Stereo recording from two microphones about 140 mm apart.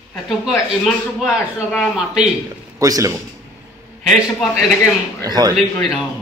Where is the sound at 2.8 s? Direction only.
25° right (ahead or behind).